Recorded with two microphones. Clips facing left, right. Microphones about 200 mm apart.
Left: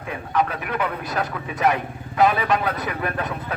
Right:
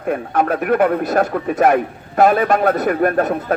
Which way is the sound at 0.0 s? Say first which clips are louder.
Right 6 dB; 50° right (ahead or behind).